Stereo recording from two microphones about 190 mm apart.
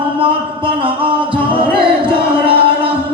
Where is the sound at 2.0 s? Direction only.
30° right (ahead or behind).